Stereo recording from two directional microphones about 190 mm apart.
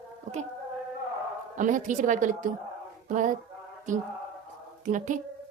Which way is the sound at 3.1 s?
40° right (ahead or behind).